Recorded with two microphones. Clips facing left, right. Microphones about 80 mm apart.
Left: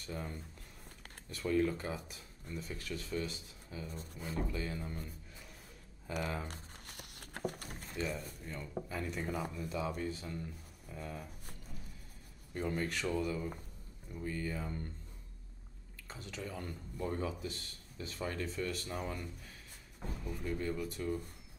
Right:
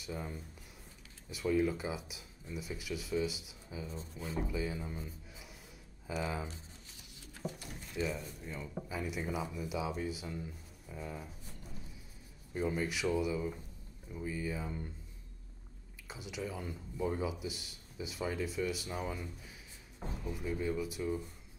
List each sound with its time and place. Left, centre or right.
0.0 s speech: centre
6.4 s crumpling: left
7.9 s speech: centre
12.5 s speech: centre
16.1 s speech: centre